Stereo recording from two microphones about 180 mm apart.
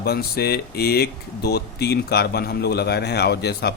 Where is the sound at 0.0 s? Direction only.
60° left (ahead or behind).